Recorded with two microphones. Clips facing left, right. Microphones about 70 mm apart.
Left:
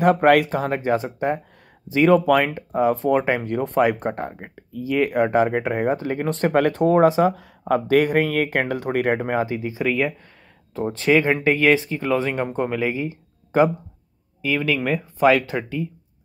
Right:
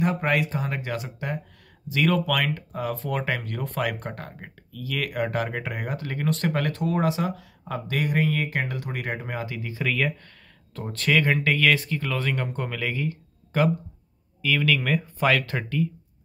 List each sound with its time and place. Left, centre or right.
0.0 s speech: left
6.5 s speech: left
9.4 s speech: left